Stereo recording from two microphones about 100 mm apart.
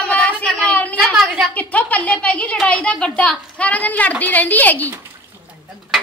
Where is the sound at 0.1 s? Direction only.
10° left (ahead or behind).